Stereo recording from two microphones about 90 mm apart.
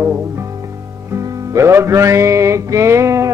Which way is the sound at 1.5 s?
30° right (ahead or behind).